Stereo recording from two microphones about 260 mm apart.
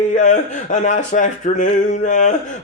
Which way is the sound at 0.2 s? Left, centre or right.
Left.